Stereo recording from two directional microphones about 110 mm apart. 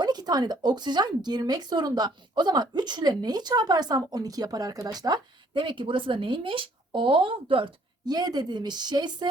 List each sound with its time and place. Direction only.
0.0 s speech: 40° right (ahead or behind)